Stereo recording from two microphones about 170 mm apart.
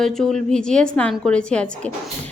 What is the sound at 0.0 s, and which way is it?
Speech, centre (ahead or behind).